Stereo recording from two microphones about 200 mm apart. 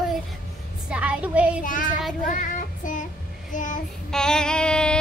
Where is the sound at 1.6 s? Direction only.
40° left (ahead or behind).